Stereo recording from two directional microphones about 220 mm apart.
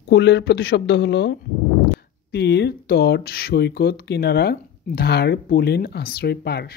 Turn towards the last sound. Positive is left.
turn(degrees=45)  # may be behind; listen again after turning